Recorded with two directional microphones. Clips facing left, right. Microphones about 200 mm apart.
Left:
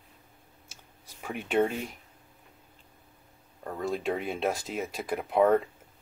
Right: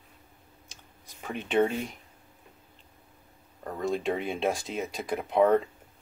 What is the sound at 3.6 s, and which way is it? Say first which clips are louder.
Speech: right 2 dB; 5° left (ahead or behind).